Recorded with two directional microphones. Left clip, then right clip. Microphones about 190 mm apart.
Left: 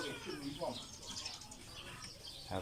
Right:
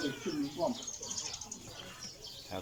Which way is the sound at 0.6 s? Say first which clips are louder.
Right 8 dB; 30° right (ahead or behind).